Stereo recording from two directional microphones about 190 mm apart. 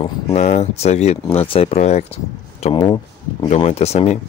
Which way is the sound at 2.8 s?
20° left (ahead or behind).